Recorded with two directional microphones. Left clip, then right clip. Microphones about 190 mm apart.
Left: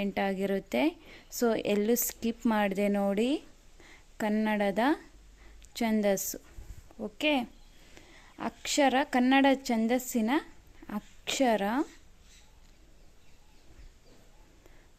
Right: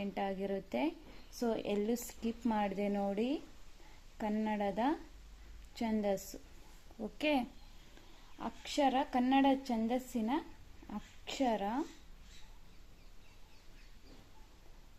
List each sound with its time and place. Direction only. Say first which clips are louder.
0.0 s a woman's voice: left 7 dB; 30° left (ahead or behind)
7.0 s a woman's voice: left 5 dB; 20° left (ahead or behind)
8.4 s a woman's voice: left 7 dB; 35° left (ahead or behind)